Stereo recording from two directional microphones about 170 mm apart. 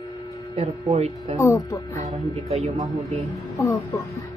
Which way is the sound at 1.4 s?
20° left (ahead or behind).